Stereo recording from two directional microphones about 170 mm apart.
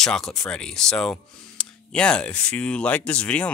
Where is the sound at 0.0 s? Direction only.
5° left (ahead or behind).